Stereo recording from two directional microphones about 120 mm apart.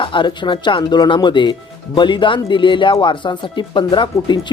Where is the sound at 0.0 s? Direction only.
40° left (ahead or behind).